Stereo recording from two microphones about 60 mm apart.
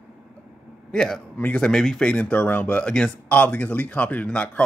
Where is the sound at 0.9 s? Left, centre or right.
Centre.